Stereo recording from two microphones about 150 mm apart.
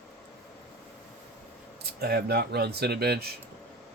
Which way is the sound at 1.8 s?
90° right.